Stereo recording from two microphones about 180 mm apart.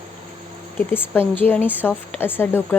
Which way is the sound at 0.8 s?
10° left (ahead or behind).